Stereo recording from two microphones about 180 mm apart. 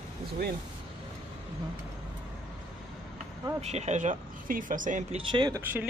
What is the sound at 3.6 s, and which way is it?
Speech, 40° right (ahead or behind).